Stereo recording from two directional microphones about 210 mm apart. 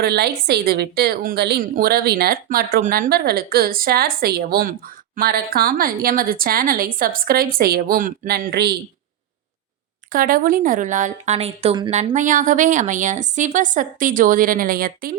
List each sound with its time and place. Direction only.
0.0 s a woman's voice: 50° right (ahead or behind)
10.1 s speech: 40° right (ahead or behind)